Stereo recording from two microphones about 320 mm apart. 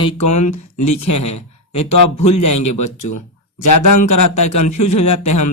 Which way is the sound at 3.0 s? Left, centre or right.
Left.